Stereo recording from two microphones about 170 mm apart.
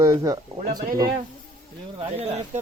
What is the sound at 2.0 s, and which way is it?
Speech, 35° right (ahead or behind).